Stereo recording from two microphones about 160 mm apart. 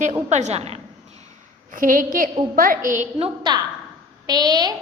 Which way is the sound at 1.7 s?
60° right (ahead or behind).